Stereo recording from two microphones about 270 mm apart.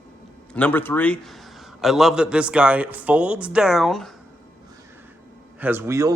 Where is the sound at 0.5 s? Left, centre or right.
Centre.